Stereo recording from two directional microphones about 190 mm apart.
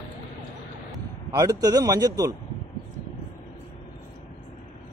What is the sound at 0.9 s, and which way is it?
Speech, 15° right (ahead or behind).